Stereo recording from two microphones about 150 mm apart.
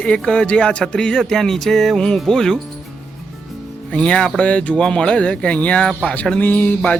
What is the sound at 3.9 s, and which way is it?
Speech, 5° left (ahead or behind).